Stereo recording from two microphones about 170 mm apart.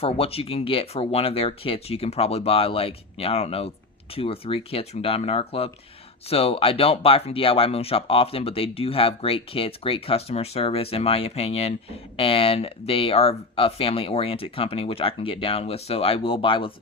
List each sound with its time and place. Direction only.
0.0 s speech: 35° left (ahead or behind)